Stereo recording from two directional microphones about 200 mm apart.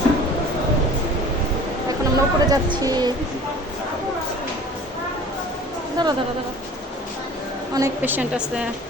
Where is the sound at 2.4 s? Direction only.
20° right (ahead or behind).